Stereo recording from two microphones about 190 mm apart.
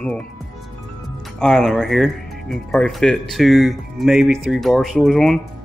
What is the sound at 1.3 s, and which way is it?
Speech, 5° left (ahead or behind).